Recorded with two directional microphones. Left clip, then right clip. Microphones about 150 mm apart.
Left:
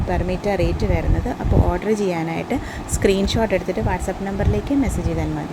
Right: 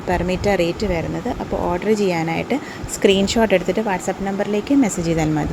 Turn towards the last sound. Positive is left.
turn(degrees=-40)  # may be behind; listen again after turning